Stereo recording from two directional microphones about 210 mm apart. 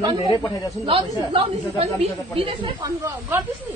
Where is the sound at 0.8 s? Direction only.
20° right (ahead or behind).